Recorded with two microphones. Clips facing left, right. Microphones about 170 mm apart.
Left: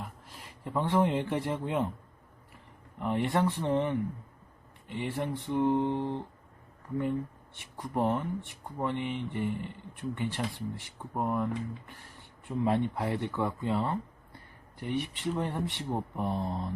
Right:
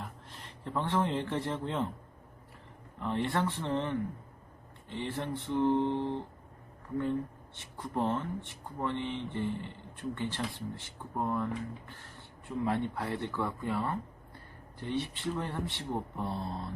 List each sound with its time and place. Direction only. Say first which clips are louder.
0.0 s speech: left 1 dB; 10° left (ahead or behind)
3.0 s speech: left 3 dB; 15° left (ahead or behind)
7.6 s speech: left 3 dB; 15° left (ahead or behind)
12.5 s speech: left 3 dB; 20° left (ahead or behind)